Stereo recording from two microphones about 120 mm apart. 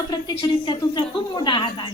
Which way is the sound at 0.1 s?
40° left (ahead or behind).